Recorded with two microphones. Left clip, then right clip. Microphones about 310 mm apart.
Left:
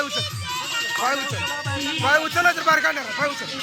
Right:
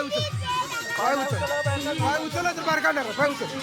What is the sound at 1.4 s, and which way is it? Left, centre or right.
Speech, centre.